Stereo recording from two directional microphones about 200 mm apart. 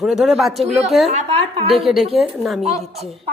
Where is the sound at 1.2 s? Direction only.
30° right (ahead or behind).